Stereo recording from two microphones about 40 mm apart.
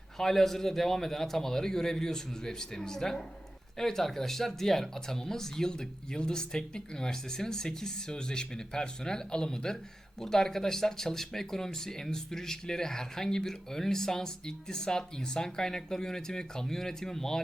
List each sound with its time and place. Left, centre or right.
0.2 s speech: centre